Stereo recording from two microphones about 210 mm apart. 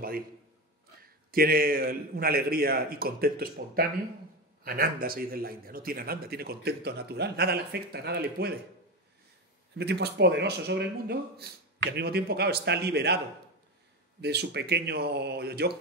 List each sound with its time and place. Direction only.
1.3 s a man's voice: 45° right (ahead or behind)
9.8 s a man's voice: 55° right (ahead or behind)
14.2 s a man's voice: 50° right (ahead or behind)